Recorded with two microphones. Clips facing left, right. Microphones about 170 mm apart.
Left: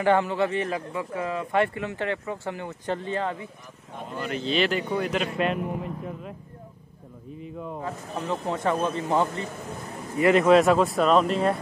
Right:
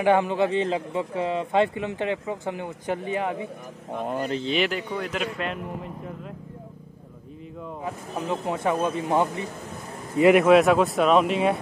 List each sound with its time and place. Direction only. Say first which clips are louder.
0.0 s speech: right 2 dB; 15° right (ahead or behind)
4.6 s speech: left 1 dB; 5° right (ahead or behind)
7.8 s speech: right 3 dB; 10° right (ahead or behind)
10.4 s speech: right 1 dB; centre (ahead or behind)